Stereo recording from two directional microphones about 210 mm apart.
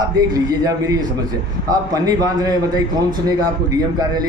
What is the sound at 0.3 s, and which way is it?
A man's voice, 15° right (ahead or behind).